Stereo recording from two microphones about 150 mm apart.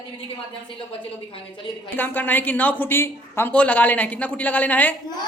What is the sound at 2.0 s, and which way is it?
A woman's voice, 10° left (ahead or behind).